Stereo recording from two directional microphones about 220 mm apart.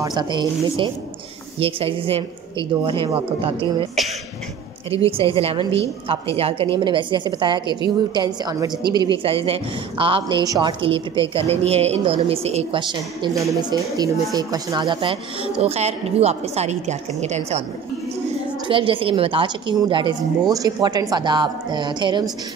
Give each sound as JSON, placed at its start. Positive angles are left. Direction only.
{"t": 0.0, "sound": "a woman's voice", "side_deg": -20}
{"t": 5.0, "sound": "a woman's voice", "side_deg": -25}
{"t": 18.7, "sound": "a woman's voice", "side_deg": -25}